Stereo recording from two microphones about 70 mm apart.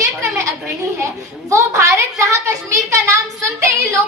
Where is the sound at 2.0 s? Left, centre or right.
Right.